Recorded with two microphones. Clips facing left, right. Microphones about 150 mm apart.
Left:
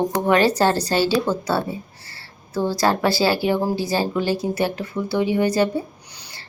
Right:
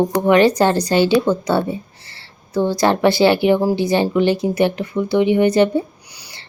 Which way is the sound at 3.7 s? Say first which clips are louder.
Right 5 dB; 20° right (ahead or behind).